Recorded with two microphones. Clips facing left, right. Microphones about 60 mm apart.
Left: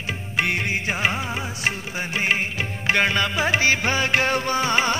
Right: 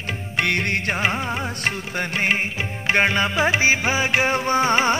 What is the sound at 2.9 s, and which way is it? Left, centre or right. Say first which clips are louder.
Music: right 2 dB; right.